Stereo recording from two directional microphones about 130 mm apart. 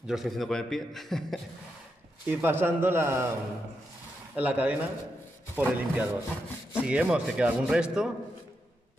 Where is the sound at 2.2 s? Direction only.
15° right (ahead or behind).